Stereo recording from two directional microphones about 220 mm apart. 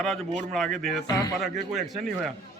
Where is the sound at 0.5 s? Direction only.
Centre (ahead or behind).